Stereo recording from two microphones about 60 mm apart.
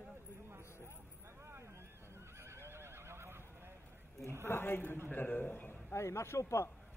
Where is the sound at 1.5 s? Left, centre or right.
Right.